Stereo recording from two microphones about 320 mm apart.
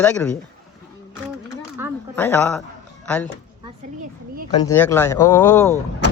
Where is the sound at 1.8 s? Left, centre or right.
Centre.